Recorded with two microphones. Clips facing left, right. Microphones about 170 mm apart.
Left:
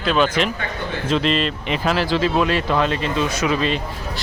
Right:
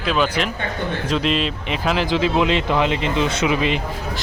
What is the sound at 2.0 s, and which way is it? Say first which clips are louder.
Speech: right 1 dB; 15° right (ahead or behind).